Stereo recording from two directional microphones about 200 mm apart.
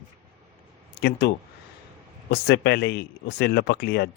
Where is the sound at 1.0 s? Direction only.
55° left (ahead or behind).